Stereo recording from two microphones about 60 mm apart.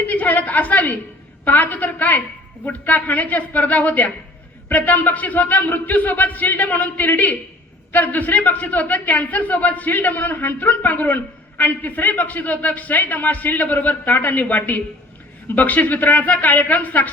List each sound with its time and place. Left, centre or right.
0.0 s a man's voice: left